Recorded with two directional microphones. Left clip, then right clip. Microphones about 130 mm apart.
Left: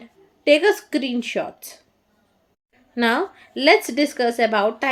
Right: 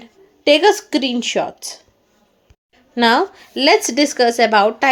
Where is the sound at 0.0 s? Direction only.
30° right (ahead or behind).